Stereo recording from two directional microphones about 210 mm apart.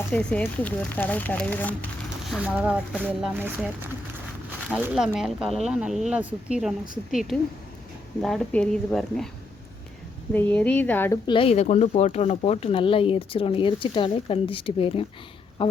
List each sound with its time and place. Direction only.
0.1 s speech: 5° left (ahead or behind)
2.3 s speech: 5° right (ahead or behind)
4.7 s speech: 5° right (ahead or behind)
10.3 s speech: 5° left (ahead or behind)
11.3 s speech: 25° left (ahead or behind)